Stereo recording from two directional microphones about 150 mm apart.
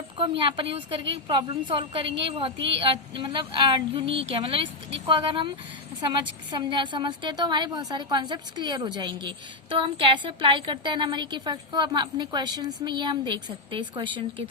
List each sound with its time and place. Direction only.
0.2 s a woman's voice: 35° right (ahead or behind)